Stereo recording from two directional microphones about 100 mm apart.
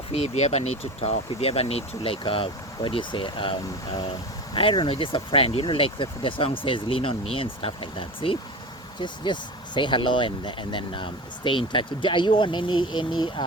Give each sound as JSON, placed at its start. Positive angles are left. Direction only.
{"t": 0.1, "sound": "speech", "side_deg": 90}
{"t": 4.5, "sound": "speech", "side_deg": 60}
{"t": 9.0, "sound": "speech", "side_deg": 50}